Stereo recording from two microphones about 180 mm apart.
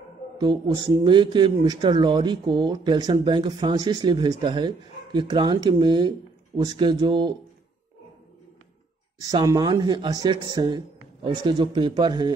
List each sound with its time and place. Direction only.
0.4 s a man's voice: 25° right (ahead or behind)
9.2 s a man's voice: 20° right (ahead or behind)